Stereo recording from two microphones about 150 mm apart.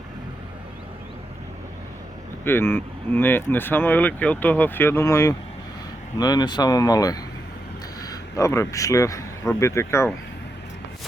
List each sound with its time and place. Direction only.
2.4 s speech: 15° left (ahead or behind)